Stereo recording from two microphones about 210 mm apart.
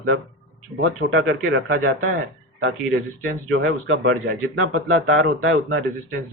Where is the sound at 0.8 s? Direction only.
60° right (ahead or behind).